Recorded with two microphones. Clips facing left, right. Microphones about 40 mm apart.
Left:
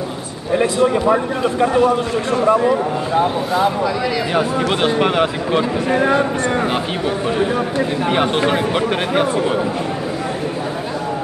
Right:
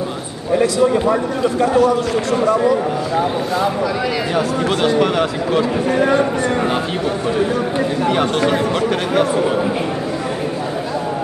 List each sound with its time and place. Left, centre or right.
1.0 s speech: left
4.4 s speech: left
8.0 s speech: left